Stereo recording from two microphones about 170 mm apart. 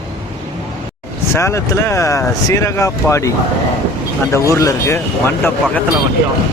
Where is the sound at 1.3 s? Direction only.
15° left (ahead or behind).